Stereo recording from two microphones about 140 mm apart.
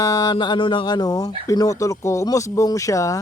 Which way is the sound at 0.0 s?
25° left (ahead or behind).